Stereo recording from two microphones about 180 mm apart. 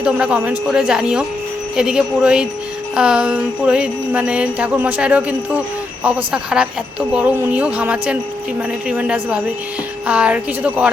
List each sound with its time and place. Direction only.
0.0 s speech: 5° right (ahead or behind)
2.9 s music: 5° right (ahead or behind)
6.3 s speech: 5° right (ahead or behind)
7.1 s music: 10° right (ahead or behind)